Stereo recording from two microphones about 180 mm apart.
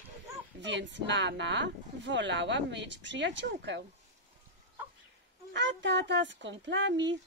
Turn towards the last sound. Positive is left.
turn(degrees=-80)